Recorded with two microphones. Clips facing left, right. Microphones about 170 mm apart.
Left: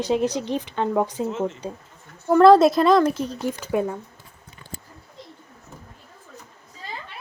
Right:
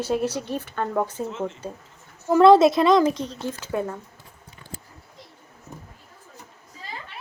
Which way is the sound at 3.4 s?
15° left (ahead or behind).